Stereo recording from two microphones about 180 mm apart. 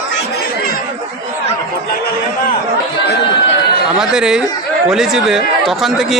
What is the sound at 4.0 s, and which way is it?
A man's voice, 5° right (ahead or behind).